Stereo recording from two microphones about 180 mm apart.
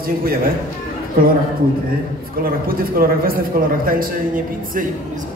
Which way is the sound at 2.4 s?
55° right (ahead or behind).